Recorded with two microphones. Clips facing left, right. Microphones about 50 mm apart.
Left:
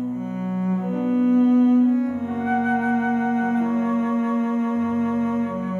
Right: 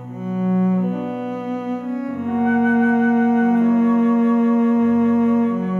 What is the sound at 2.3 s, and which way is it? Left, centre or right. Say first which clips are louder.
Flute: right 6 dB; right.